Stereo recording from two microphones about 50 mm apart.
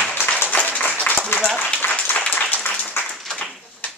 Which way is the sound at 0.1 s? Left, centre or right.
Left.